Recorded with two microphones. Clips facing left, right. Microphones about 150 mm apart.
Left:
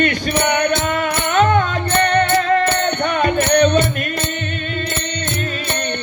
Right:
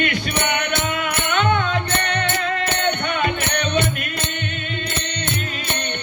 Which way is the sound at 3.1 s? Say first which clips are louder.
Left 6 dB; 40° left (ahead or behind).